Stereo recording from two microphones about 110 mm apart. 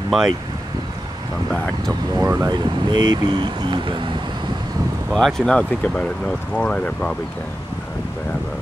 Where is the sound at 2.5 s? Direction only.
40° right (ahead or behind).